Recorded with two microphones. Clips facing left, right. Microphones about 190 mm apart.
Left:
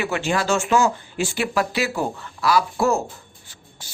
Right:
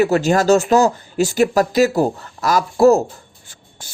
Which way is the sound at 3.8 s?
50° right (ahead or behind).